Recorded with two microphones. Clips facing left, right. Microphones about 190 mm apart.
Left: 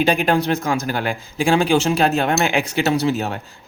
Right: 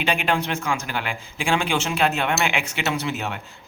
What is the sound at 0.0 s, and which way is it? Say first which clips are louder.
A man's voice: left 6 dB; 40° left (ahead or behind).